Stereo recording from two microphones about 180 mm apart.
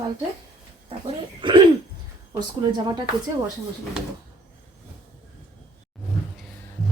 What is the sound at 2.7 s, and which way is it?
Speech, 20° right (ahead or behind).